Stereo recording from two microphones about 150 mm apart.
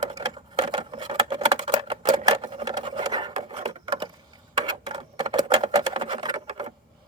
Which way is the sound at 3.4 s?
40° right (ahead or behind).